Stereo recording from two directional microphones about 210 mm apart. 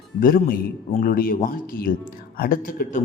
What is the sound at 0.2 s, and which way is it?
A man's voice, 40° left (ahead or behind).